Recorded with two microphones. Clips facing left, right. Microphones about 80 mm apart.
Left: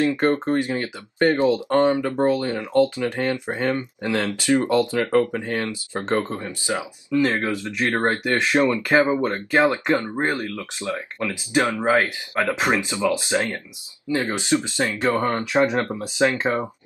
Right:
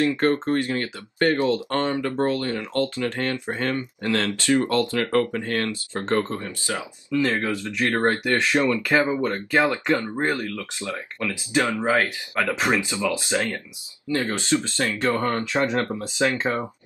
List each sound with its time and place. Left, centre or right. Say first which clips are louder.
0.0 s speech: left 1 dB; centre